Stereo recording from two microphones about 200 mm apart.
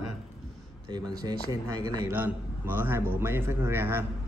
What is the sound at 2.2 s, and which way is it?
A man's voice, 10° right (ahead or behind).